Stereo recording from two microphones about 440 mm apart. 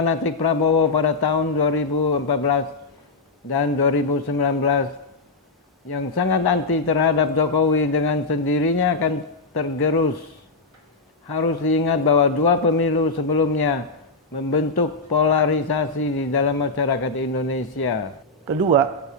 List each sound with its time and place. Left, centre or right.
0.1 s a man's voice: left
5.9 s a man's voice: left
11.3 s a man's voice: left